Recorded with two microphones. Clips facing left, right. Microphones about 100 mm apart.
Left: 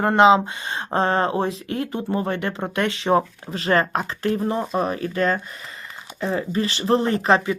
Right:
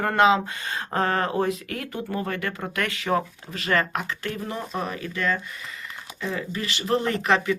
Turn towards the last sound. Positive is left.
turn(degrees=30)  # may be behind; listen again after turning